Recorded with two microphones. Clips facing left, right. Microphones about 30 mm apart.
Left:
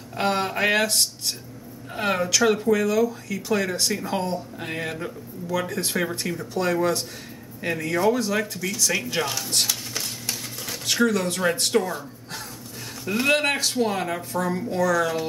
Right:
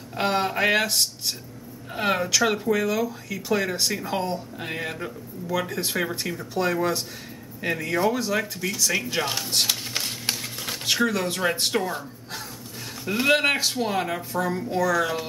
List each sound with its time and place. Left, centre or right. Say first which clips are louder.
0.2 s speech: even; centre
9.7 s a sound: right 2 dB; right
10.9 s speech: left 2 dB; centre
13.0 s speech: right 1 dB; centre